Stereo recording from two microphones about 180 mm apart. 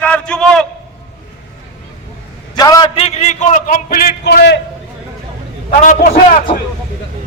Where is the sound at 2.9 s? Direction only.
35° left (ahead or behind); by 4.5 s 65° left (ahead or behind).